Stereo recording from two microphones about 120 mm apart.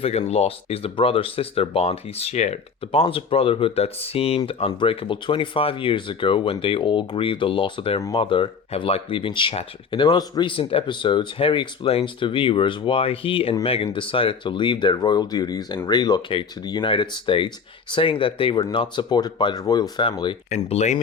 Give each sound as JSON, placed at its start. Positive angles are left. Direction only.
{"t": 0.0, "sound": "speech", "side_deg": 60}
{"t": 20.7, "sound": "speech", "side_deg": 70}